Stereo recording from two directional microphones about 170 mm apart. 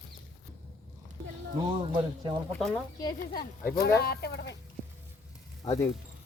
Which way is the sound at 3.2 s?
60° left (ahead or behind).